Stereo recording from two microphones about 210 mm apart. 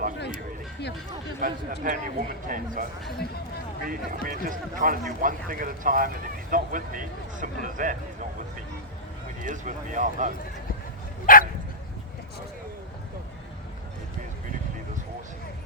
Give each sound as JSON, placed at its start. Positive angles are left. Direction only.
{"t": 1.4, "sound": "speech", "side_deg": -40}
{"t": 3.8, "sound": "speech", "side_deg": -40}
{"t": 9.4, "sound": "speech", "side_deg": -40}
{"t": 11.3, "sound": "speech", "side_deg": 40}